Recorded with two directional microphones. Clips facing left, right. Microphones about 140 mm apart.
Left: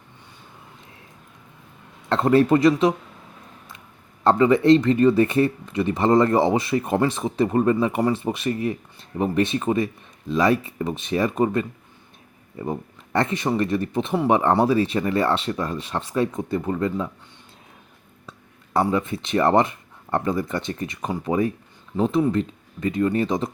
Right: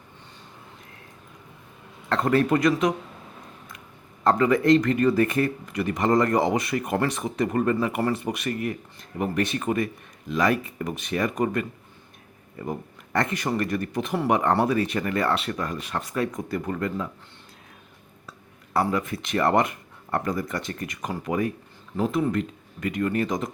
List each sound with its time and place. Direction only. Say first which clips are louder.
2.0 s speech: left 4 dB; 25° left (ahead or behind)
4.2 s speech: left 3 dB; 30° left (ahead or behind)
18.9 s speech: left 4 dB; 25° left (ahead or behind)